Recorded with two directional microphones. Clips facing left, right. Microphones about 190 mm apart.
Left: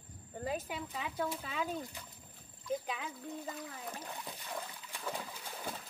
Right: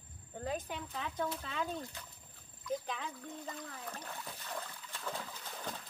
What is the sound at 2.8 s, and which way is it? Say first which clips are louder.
Splash: left 1 dB; 5° left (ahead or behind).